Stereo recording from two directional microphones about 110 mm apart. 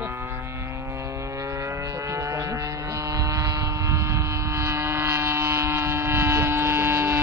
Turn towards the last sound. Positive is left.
turn(degrees=-20)  # may be behind; listen again after turning